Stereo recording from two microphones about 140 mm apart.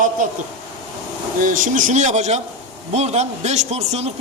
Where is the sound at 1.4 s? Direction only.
70° right (ahead or behind).